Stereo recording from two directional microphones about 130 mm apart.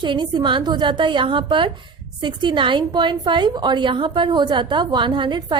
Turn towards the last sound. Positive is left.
turn(degrees=-35)  # may be behind; listen again after turning